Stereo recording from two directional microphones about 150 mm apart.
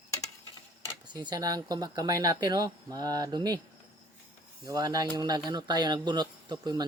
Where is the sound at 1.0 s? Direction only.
30° right (ahead or behind).